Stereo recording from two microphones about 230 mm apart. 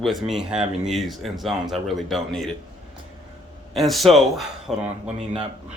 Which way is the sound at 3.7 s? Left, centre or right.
Centre.